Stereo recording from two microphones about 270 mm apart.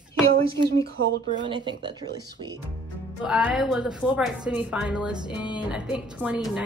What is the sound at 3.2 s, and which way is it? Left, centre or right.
Speech, centre.